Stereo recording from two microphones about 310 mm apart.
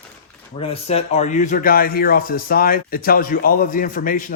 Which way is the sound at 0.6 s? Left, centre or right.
Centre.